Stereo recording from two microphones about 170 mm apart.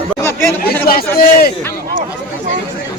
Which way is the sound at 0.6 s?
65° left (ahead or behind).